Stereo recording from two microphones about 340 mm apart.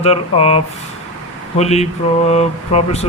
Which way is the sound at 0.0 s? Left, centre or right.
Centre.